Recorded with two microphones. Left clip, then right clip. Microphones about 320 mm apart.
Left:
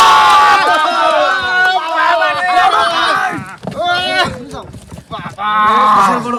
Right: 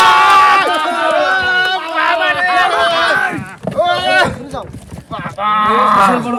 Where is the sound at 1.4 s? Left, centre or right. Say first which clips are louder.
Left 2 dB; centre.